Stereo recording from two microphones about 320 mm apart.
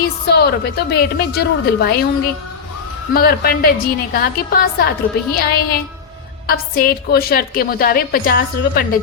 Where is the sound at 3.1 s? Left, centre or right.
Left.